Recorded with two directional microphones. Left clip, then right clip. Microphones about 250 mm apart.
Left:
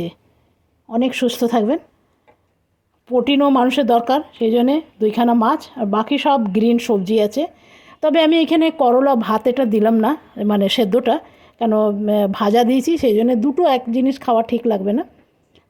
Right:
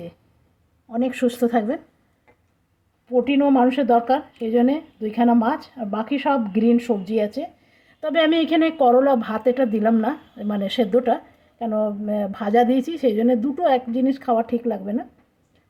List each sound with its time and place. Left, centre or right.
0.9 s speech: left
3.1 s speech: left